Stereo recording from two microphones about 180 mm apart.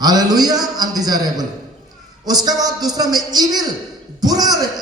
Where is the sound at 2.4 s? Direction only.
20° right (ahead or behind).